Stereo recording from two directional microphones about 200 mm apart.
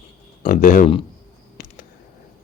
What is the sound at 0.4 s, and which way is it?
Speech, 40° left (ahead or behind).